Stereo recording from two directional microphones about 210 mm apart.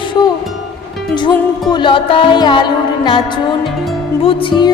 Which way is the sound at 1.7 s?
20° left (ahead or behind).